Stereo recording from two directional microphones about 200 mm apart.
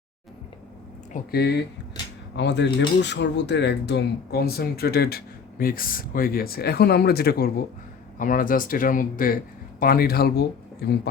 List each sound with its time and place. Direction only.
1.1 s speech: 55° left (ahead or behind)